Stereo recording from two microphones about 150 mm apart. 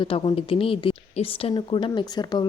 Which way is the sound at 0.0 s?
35° left (ahead or behind).